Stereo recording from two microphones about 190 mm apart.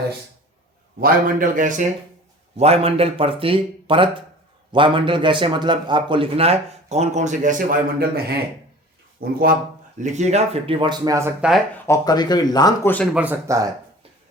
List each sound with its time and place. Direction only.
0.9 s a man's voice: 45° right (ahead or behind)
2.6 s a man's voice: 30° right (ahead or behind); by 8.2 s 50° right (ahead or behind)
9.2 s a man's voice: 50° right (ahead or behind)
10.0 s a man's voice: 40° right (ahead or behind); by 11.6 s 5° right (ahead or behind)
11.9 s speech: 20° left (ahead or behind)
13.1 s speech: 10° right (ahead or behind)